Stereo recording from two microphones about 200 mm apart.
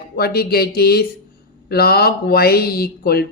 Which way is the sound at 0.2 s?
50° left (ahead or behind).